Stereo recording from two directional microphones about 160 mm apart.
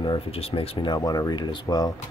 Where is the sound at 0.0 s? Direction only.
35° left (ahead or behind).